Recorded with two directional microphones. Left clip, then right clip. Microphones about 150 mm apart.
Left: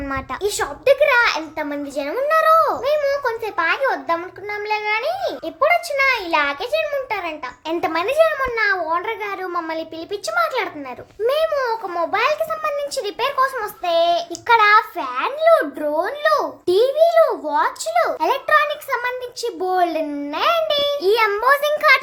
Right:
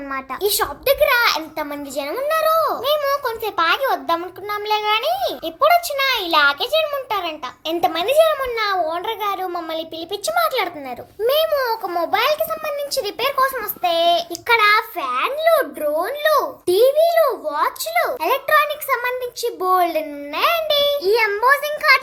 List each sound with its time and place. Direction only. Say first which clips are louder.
0.4 s a child's voice: left 1 dB; centre (ahead or behind)
2.1 s a child's voice: left 3 dB; 10° left (ahead or behind)
2.8 s a child's voice: even; centre (ahead or behind)
7.8 s a child's voice: right 1 dB; 10° left (ahead or behind)
21.0 s a child's voice: even; 40° left (ahead or behind)